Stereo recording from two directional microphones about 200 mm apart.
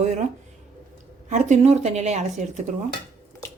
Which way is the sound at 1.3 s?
35° right (ahead or behind).